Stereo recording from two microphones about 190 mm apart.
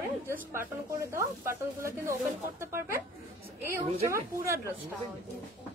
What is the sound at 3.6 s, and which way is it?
Speech, 15° right (ahead or behind).